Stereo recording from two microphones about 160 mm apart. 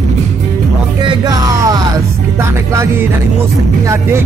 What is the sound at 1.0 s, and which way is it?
Music, 20° right (ahead or behind).